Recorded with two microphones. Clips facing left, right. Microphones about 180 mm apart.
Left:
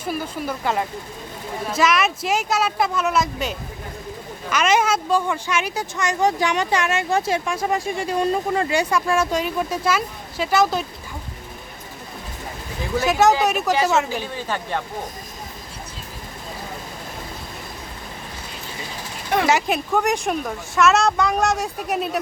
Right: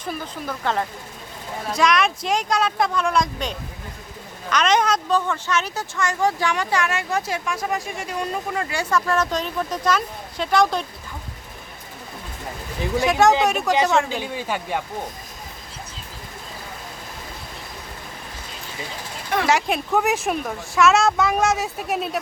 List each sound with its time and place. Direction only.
0.0 s speech: 10° left (ahead or behind); by 8.6 s 30° left (ahead or behind)
8.7 s speech: 15° left (ahead or behind)
13.1 s speech: centre (ahead or behind)
14.2 s speech: 15° right (ahead or behind)
19.5 s speech: centre (ahead or behind)